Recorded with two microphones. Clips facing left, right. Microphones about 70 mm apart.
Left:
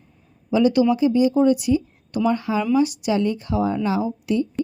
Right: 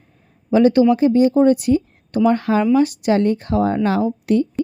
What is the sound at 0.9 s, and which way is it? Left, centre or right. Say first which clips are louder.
A woman's voice: right 4 dB; right.